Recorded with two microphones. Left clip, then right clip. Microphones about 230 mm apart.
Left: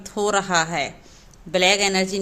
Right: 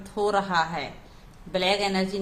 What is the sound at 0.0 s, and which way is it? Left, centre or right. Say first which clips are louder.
A woman's voice: left 3 dB; left.